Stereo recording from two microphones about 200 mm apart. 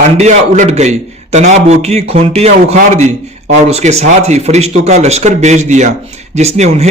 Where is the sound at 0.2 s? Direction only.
35° right (ahead or behind).